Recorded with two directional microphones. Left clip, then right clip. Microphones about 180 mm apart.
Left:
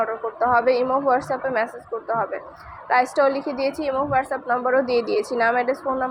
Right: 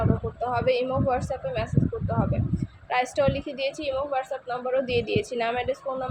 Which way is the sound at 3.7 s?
20° left (ahead or behind).